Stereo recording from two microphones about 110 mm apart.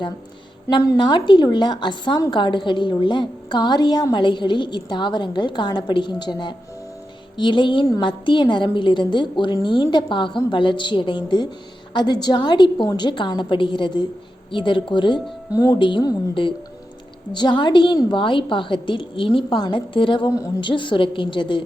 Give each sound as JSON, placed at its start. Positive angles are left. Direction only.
{"t": 0.7, "sound": "a woman's voice", "side_deg": 40}
{"t": 15.5, "sound": "speech", "side_deg": 30}
{"t": 15.8, "sound": "a woman's voice", "side_deg": 45}
{"t": 17.3, "sound": "a woman's voice", "side_deg": 45}